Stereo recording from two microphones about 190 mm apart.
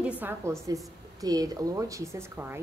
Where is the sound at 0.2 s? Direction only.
10° right (ahead or behind).